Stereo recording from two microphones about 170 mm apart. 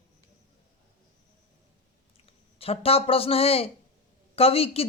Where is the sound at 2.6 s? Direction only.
35° left (ahead or behind).